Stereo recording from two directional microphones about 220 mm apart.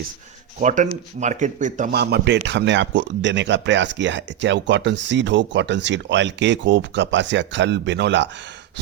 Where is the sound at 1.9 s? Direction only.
50° right (ahead or behind).